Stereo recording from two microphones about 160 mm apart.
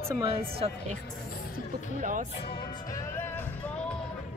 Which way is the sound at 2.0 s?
55° right (ahead or behind).